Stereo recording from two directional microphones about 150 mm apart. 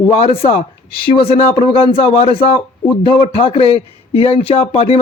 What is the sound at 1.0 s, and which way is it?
A man's voice, 35° left (ahead or behind).